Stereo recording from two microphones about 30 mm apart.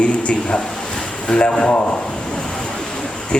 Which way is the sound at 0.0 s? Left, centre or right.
Left.